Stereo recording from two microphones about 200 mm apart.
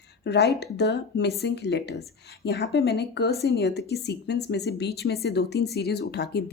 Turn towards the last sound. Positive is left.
turn(degrees=55)  # may be behind; listen again after turning